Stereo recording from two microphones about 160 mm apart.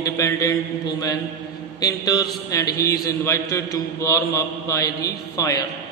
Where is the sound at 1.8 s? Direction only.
25° left (ahead or behind).